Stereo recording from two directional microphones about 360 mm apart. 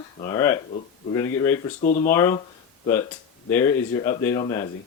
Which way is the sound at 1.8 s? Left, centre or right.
Left.